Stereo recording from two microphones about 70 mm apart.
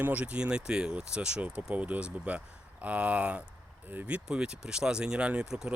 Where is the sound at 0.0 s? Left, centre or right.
Centre.